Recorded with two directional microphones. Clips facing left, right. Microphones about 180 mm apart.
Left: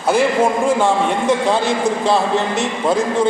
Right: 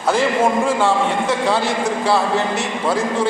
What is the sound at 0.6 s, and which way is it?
A man's voice, 15° left (ahead or behind).